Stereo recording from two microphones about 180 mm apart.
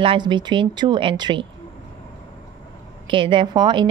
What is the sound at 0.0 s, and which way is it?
A woman's voice, 30° right (ahead or behind).